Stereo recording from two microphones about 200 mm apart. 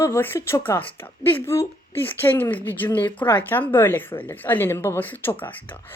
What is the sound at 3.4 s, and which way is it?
A woman's voice, 10° left (ahead or behind).